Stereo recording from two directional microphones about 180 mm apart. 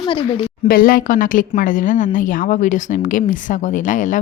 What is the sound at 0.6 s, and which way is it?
Speech, 55° left (ahead or behind).